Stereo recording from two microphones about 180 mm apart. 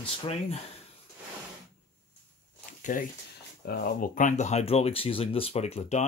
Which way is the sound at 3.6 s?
55° left (ahead or behind).